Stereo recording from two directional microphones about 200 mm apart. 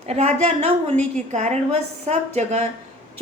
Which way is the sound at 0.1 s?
35° right (ahead or behind).